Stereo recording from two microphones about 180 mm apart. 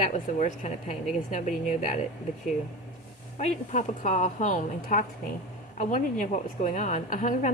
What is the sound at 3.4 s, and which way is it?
A woman's voice, 40° left (ahead or behind).